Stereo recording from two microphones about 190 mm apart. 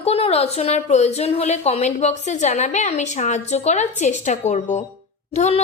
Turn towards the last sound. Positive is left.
turn(degrees=35)  # may be behind; listen again after turning